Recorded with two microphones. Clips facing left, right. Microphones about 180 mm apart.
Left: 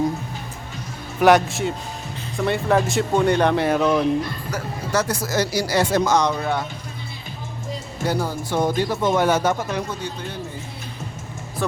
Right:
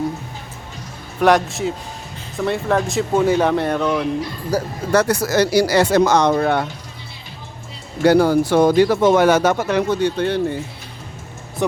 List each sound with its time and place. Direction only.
1.2 s speech: centre (ahead or behind)
4.5 s speech: 35° right (ahead or behind)
4.9 s speech: 65° right (ahead or behind)
8.0 s speech: 75° right (ahead or behind)